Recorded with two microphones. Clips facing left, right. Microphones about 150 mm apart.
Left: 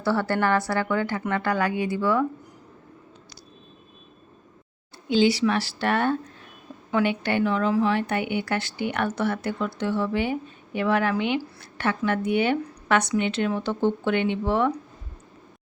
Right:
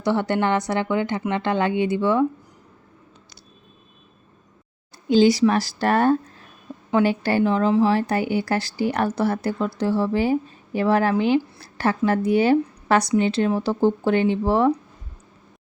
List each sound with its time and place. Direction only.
0.0 s a woman's voice: 20° right (ahead or behind)
5.0 s a woman's voice: 40° right (ahead or behind)